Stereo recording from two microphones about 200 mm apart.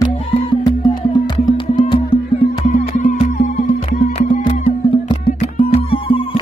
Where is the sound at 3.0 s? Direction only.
40° left (ahead or behind).